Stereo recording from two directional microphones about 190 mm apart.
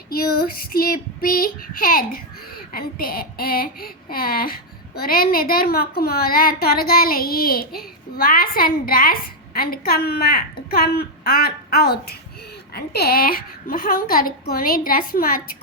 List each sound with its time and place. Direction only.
0.1 s child singing: 50° left (ahead or behind)